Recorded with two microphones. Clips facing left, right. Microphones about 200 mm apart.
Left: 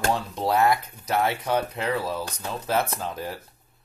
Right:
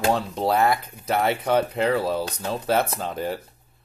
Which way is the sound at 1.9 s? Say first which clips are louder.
Right 5 dB; 30° right (ahead or behind).